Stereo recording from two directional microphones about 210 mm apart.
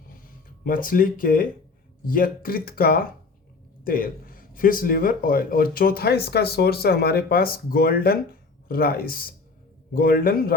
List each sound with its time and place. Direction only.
0.6 s speech: 40° left (ahead or behind)